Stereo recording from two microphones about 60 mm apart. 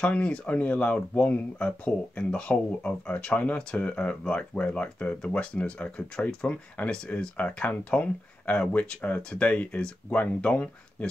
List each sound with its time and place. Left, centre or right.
0.0 s speech: centre
4.6 s speech: left